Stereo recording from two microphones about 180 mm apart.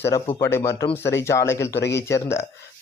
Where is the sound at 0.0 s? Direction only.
15° left (ahead or behind).